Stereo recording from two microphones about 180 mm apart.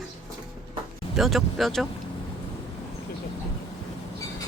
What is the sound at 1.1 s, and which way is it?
Speech, centre (ahead or behind).